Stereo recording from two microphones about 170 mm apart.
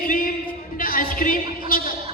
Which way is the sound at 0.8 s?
55° left (ahead or behind).